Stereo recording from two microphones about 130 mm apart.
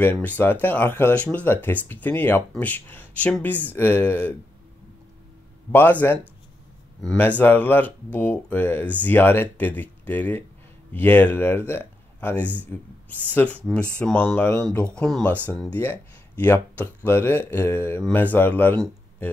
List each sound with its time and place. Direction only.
0.0 s speech: 15° left (ahead or behind)
5.7 s speech: 15° left (ahead or behind)
7.2 s speech: 15° left (ahead or behind)